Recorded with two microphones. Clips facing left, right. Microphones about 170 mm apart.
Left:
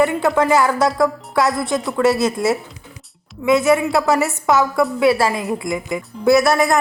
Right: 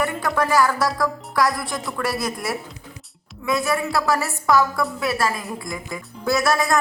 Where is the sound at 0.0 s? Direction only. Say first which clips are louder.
Left 7 dB; 20° left (ahead or behind).